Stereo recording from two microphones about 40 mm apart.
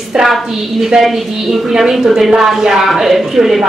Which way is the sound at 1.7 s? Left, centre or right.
Centre.